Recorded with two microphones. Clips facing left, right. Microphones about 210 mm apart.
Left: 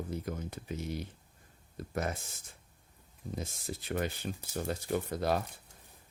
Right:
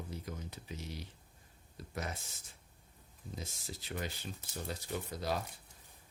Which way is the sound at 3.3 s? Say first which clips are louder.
Left 6 dB; 55° left (ahead or behind).